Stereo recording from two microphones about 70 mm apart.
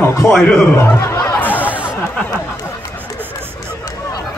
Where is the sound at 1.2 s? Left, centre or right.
Left.